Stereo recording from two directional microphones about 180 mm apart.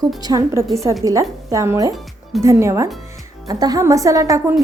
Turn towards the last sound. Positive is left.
turn(degrees=-15)  # may be behind; listen again after turning